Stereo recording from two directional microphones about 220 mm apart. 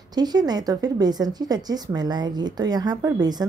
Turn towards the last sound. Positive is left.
turn(degrees=-20)  # may be behind; listen again after turning